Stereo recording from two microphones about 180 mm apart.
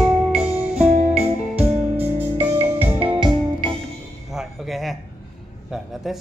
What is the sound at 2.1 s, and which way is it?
Music, 35° right (ahead or behind).